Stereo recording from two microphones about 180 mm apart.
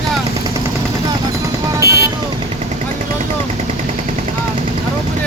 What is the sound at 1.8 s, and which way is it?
Speech, 65° left (ahead or behind).